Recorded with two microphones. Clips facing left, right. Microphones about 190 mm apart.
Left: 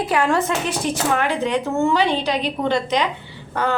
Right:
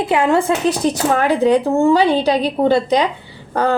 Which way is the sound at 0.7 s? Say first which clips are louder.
Right 5 dB; 40° right (ahead or behind).